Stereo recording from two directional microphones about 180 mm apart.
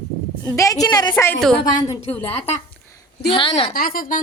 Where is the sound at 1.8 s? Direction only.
30° left (ahead or behind).